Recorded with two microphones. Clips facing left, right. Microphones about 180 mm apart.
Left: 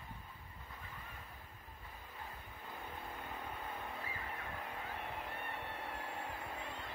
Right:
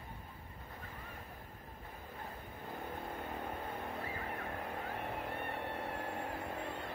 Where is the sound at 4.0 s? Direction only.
45° right (ahead or behind).